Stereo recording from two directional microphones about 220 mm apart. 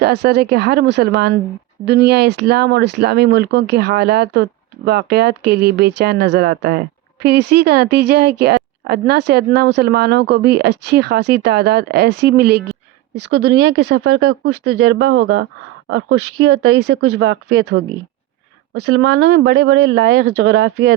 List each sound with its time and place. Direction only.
0.0 s speech: 50° right (ahead or behind)
14.9 s speech: 65° right (ahead or behind)
16.4 s speech: 45° right (ahead or behind)
19.2 s speech: 45° right (ahead or behind)